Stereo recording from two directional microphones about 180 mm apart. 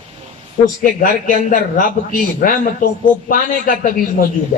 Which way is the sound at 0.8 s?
45° left (ahead or behind).